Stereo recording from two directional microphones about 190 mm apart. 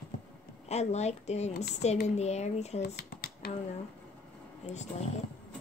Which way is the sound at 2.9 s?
55° left (ahead or behind).